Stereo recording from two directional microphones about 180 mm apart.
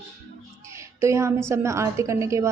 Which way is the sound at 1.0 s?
15° right (ahead or behind).